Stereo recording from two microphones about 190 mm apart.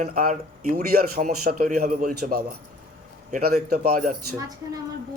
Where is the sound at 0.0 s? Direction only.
45° right (ahead or behind).